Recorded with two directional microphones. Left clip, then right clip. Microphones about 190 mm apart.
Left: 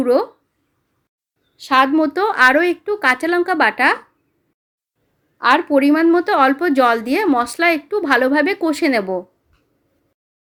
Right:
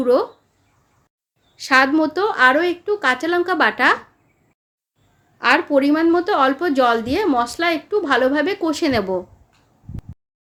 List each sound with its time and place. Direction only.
0.0 s a woman's voice: 35° left (ahead or behind)
1.5 s a woman's voice: 15° left (ahead or behind)
1.9 s a woman's voice: 35° left (ahead or behind)
5.4 s a woman's voice: 25° left (ahead or behind)
5.6 s a woman's voice: 45° left (ahead or behind); by 9.2 s 25° left (ahead or behind)